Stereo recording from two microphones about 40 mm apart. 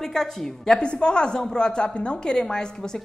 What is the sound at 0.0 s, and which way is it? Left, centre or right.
A woman's voice, centre.